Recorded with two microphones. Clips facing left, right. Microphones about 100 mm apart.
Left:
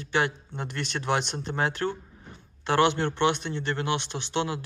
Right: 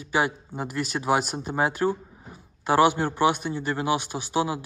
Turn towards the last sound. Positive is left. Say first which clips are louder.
# right 3 dB
turn(degrees=-10)  # may be behind; listen again after turning